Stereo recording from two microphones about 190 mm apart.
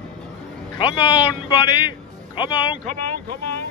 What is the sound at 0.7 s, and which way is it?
A man's voice, 25° left (ahead or behind).